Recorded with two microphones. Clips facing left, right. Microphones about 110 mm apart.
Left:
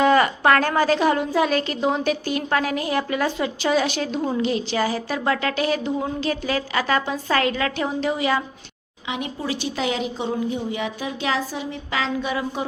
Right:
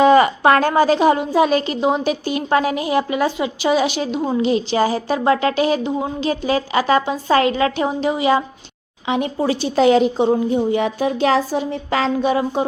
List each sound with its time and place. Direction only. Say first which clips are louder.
0.0 s a woman's voice: right 5 dB; 20° right (ahead or behind)
9.0 s a woman's voice: right 8 dB; 35° right (ahead or behind)